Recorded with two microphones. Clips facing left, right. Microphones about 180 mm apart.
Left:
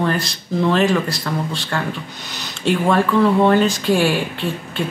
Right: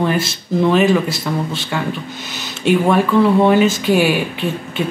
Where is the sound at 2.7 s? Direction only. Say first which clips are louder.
Right 3 dB; 5° right (ahead or behind).